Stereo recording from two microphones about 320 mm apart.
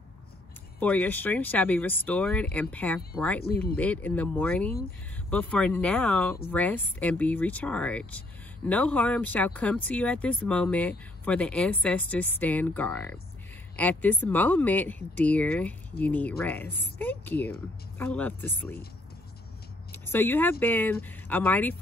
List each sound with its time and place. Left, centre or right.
0.7 s speech: centre
3.4 s speech: left
3.7 s speech: centre
19.9 s speech: centre